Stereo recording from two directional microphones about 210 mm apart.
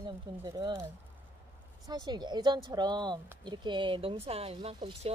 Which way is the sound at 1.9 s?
20° right (ahead or behind).